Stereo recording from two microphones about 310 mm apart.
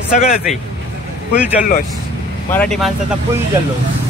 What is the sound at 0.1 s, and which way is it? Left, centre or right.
Speech, left.